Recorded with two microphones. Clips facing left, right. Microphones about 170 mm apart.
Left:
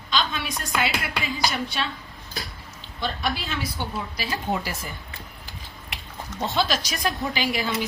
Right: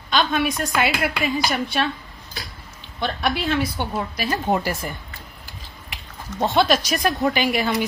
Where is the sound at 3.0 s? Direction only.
60° right (ahead or behind).